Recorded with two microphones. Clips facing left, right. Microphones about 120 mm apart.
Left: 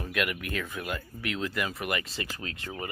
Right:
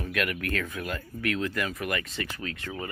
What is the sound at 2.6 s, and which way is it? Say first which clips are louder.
Speech: left 1 dB; 20° left (ahead or behind).